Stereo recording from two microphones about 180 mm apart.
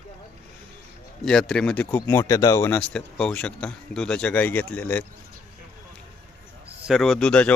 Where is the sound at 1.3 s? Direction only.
5° left (ahead or behind).